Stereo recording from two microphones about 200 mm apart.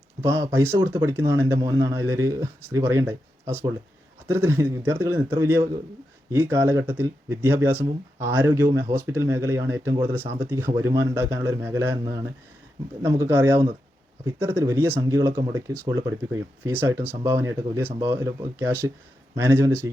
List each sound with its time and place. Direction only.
0.2 s speech: 15° right (ahead or behind)